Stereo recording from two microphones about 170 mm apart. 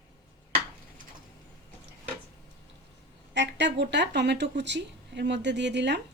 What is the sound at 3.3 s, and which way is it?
Speech, 90° right.